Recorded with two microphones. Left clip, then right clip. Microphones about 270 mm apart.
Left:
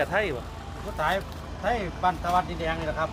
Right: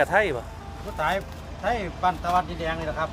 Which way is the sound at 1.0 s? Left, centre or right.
Centre.